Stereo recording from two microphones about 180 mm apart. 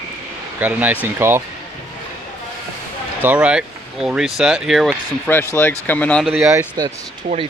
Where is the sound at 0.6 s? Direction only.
10° right (ahead or behind).